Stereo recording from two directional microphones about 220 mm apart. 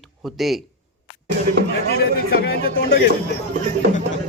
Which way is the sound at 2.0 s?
45° left (ahead or behind).